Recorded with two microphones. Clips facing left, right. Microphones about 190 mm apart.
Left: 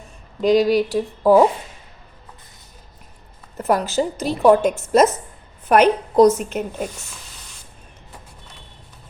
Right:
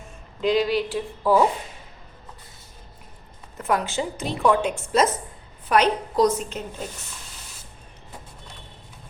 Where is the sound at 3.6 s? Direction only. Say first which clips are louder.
Left 5 dB; 40° left (ahead or behind); by 6.8 s 60° left (ahead or behind).